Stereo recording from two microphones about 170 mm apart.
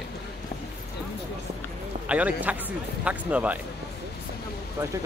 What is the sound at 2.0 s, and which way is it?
Speech, 10° right (ahead or behind).